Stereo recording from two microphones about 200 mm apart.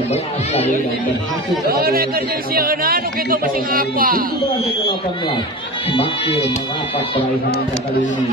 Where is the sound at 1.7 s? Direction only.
50° right (ahead or behind).